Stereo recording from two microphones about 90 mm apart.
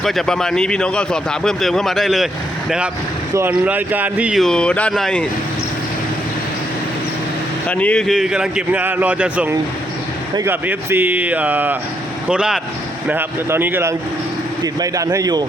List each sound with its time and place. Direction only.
0.0 s a man's voice: 5° left (ahead or behind); by 4.3 s 20° right (ahead or behind)
4.3 s music: centre (ahead or behind)
7.7 s music: 15° left (ahead or behind)
8.0 s a man's voice: centre (ahead or behind)
8.8 s a man's voice: 20° right (ahead or behind)
10.4 s a man's voice: 25° right (ahead or behind); by 12.5 s 10° right (ahead or behind)
13.1 s speech: 20° right (ahead or behind)
14.6 s a man's voice: 40° right (ahead or behind)